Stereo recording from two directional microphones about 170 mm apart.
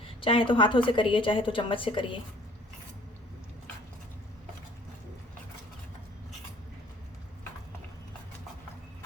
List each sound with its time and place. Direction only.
0.2 s a woman's voice: 30° left (ahead or behind)